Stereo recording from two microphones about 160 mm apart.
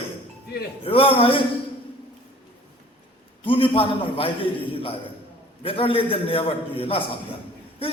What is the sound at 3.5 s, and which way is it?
Speech, 35° left (ahead or behind).